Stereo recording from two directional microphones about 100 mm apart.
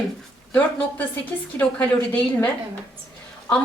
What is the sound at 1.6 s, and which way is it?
Speech, 15° left (ahead or behind).